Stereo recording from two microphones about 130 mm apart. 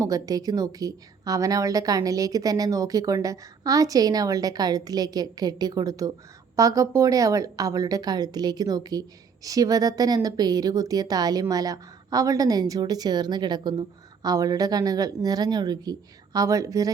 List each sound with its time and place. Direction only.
0.0 s a woman's voice: 25° right (ahead or behind)